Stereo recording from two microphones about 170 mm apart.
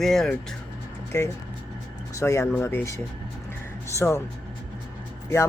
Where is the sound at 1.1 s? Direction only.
20° left (ahead or behind).